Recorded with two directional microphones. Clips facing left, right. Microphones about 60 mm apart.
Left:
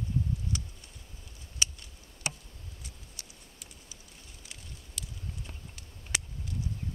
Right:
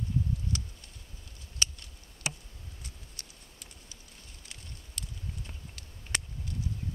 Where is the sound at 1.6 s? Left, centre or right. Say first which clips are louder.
Even; centre.